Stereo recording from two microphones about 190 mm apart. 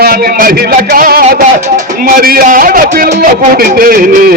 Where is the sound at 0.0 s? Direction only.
55° right (ahead or behind).